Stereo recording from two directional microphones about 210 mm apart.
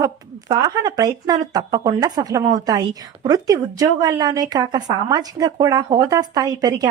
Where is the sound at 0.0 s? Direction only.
20° right (ahead or behind).